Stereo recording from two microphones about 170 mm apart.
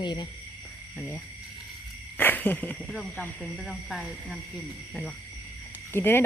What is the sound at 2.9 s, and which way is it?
Speech, 5° left (ahead or behind).